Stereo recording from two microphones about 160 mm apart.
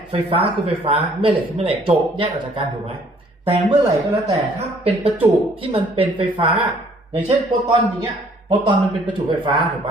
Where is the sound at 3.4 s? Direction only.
35° right (ahead or behind).